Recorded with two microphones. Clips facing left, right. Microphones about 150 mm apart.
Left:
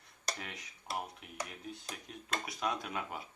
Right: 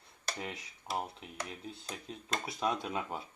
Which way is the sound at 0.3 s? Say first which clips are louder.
Right 5 dB; 25° right (ahead or behind).